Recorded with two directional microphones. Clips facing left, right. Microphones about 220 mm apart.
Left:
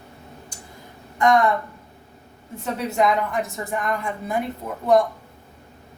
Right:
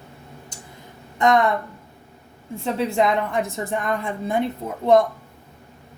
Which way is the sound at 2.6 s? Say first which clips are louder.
Right 1 dB; 30° right (ahead or behind).